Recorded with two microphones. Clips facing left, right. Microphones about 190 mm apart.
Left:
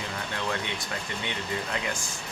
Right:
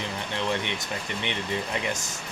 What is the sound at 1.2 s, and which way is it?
Speech, 20° right (ahead or behind).